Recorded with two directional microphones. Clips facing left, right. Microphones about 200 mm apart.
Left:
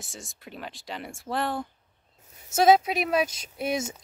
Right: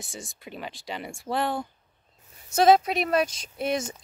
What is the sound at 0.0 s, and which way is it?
Speech, centre (ahead or behind).